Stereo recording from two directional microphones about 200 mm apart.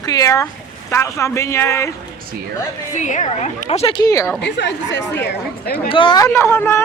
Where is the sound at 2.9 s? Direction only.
35° left (ahead or behind); by 4.3 s 15° left (ahead or behind).